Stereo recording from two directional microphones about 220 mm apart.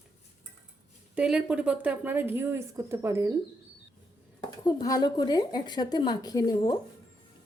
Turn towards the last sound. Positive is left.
turn(degrees=20)  # may be behind; listen again after turning